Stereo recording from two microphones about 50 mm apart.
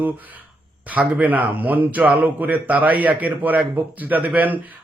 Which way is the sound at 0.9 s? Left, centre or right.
Right.